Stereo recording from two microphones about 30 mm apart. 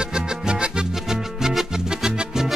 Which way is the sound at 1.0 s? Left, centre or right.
Centre.